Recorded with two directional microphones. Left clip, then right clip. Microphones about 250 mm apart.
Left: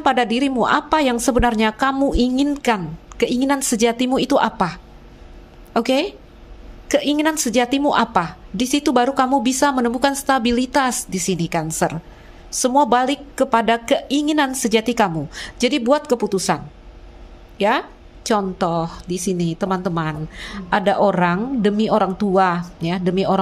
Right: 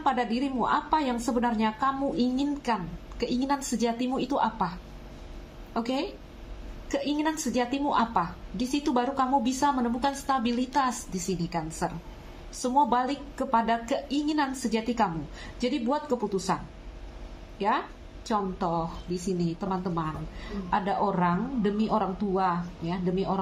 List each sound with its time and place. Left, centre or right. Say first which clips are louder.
0.0 s a woman's voice: left 10 dB; left
17.6 s a woman's voice: left 9 dB; left